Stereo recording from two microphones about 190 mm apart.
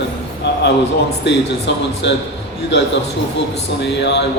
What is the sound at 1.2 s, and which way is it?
Speech, 65° left (ahead or behind).